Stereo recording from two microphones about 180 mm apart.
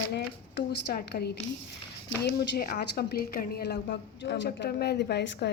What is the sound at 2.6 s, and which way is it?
A woman's voice, 60° left (ahead or behind).